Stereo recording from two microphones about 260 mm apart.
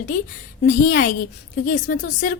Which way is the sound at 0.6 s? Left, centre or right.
Left.